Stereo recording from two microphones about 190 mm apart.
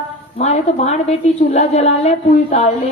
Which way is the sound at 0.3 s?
35° left (ahead or behind).